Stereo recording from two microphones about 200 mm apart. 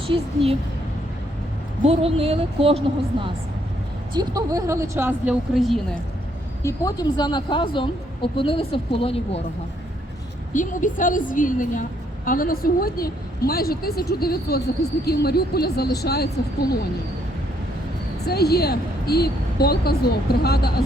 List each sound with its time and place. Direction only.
0.1 s speech: 25° right (ahead or behind)
1.9 s speech: 30° right (ahead or behind); by 6.0 s centre (ahead or behind)
6.6 s speech: 15° left (ahead or behind)
10.5 s a woman's voice: 40° left (ahead or behind)
18.3 s a woman's voice: 50° left (ahead or behind)